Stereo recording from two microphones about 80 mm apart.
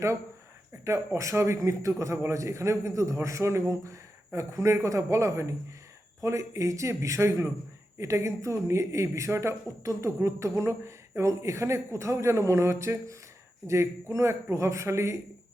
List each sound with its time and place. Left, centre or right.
0.9 s a man's voice: right